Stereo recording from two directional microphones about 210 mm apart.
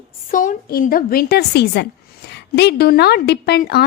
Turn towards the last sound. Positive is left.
turn(degrees=50)  # may be behind; listen again after turning